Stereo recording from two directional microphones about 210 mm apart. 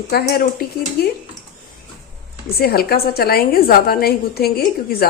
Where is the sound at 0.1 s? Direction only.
50° left (ahead or behind).